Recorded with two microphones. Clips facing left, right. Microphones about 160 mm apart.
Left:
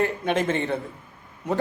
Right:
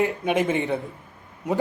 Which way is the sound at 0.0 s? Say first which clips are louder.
Right 1 dB; 10° right (ahead or behind).